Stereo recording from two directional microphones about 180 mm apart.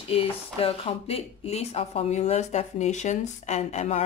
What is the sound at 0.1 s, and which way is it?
Speech, 30° left (ahead or behind).